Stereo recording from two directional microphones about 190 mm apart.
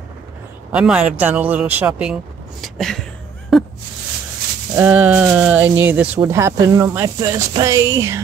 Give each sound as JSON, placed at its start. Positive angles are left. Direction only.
{"t": 0.7, "sound": "speech", "side_deg": -5}
{"t": 2.6, "sound": "a sound", "side_deg": 0}
{"t": 4.7, "sound": "speech", "side_deg": -5}